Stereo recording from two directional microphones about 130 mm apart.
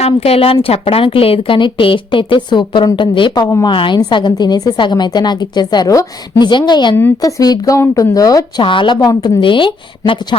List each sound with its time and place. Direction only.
0.0 s a woman's voice: 50° left (ahead or behind); by 8.6 s 30° left (ahead or behind)
8.6 s a woman's voice: 40° left (ahead or behind)